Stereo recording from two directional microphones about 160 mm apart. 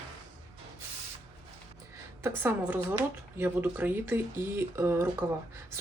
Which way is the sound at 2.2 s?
15° right (ahead or behind).